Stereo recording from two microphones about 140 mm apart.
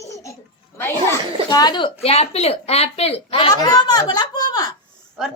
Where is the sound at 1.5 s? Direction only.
30° left (ahead or behind).